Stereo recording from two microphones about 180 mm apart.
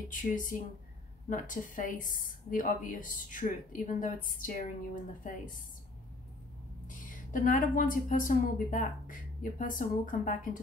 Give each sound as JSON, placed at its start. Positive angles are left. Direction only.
{"t": 0.1, "sound": "a woman's voice", "side_deg": 45}
{"t": 7.1, "sound": "a woman's voice", "side_deg": 45}